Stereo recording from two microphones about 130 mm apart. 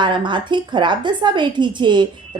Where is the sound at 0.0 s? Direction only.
35° right (ahead or behind).